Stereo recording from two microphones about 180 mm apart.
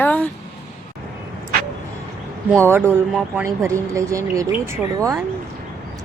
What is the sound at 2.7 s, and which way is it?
Speech, 10° right (ahead or behind).